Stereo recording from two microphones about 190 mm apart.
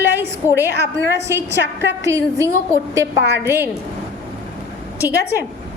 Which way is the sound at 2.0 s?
15° right (ahead or behind).